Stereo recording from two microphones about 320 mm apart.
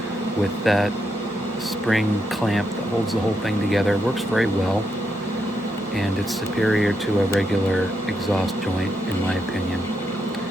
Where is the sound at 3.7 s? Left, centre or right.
Centre.